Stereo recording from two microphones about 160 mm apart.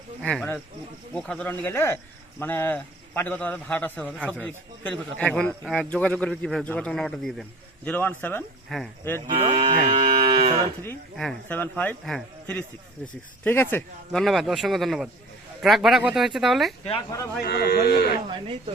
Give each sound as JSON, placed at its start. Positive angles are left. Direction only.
{"t": 0.2, "sound": "a man's voice", "side_deg": 5}
{"t": 9.3, "sound": "cattle", "side_deg": -35}
{"t": 11.2, "sound": "a man's voice", "side_deg": 5}
{"t": 14.1, "sound": "speech", "side_deg": 0}
{"t": 17.4, "sound": "speech", "side_deg": 75}